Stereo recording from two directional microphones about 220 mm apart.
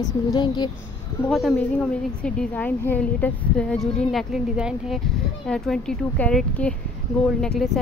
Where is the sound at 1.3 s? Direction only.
Centre (ahead or behind).